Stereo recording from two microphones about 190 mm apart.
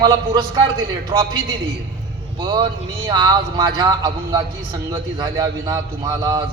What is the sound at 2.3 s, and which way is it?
A man's voice, 25° right (ahead or behind).